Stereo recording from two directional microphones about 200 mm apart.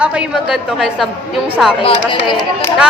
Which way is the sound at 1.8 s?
25° left (ahead or behind).